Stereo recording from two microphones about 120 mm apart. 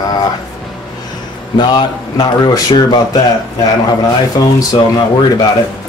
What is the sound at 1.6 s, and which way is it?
Speech, 40° left (ahead or behind).